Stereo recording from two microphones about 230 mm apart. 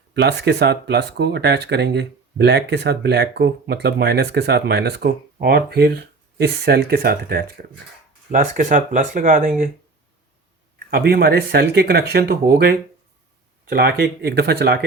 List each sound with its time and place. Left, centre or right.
0.1 s speech: right
10.9 s speech: right